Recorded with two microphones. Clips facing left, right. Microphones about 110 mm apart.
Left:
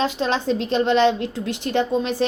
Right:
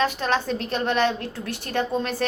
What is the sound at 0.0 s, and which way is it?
A woman's voice, 20° left (ahead or behind).